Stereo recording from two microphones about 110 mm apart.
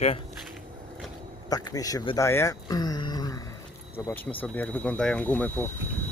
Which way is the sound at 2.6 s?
35° left (ahead or behind).